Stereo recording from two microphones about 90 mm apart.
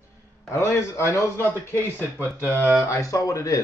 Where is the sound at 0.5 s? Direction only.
30° left (ahead or behind).